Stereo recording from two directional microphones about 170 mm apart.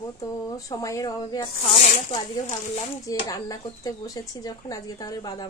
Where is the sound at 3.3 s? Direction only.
20° left (ahead or behind).